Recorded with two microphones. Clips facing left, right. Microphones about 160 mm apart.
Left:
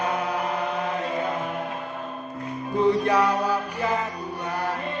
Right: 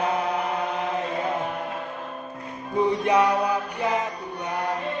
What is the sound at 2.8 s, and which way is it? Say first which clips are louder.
Music: even; 20° right (ahead or behind).